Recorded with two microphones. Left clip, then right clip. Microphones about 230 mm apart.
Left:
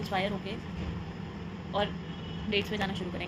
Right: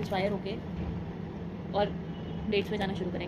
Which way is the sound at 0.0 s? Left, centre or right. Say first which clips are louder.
Right 1 dB; left.